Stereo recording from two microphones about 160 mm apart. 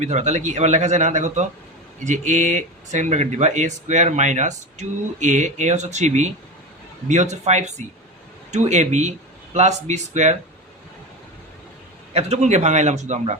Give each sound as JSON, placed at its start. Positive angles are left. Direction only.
{"t": 0.0, "sound": "speech", "side_deg": -45}
{"t": 12.1, "sound": "speech", "side_deg": -45}